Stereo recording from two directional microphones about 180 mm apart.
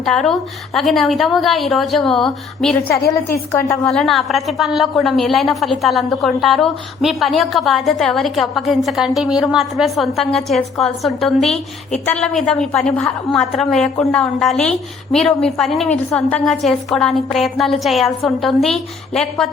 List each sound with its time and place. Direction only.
0.0 s a woman's voice: centre (ahead or behind)
3.5 s a woman's voice: 15° left (ahead or behind)
3.8 s a woman's voice: centre (ahead or behind)